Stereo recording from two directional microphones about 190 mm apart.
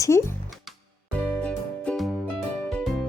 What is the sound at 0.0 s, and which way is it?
Music, 15° left (ahead or behind).